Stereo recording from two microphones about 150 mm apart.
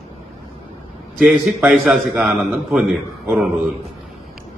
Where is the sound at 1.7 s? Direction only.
Centre (ahead or behind).